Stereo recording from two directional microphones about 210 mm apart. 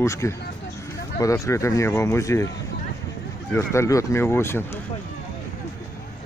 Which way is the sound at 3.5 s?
15° left (ahead or behind).